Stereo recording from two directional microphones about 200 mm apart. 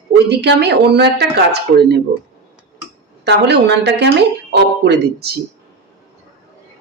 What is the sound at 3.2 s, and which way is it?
Speech, 55° right (ahead or behind).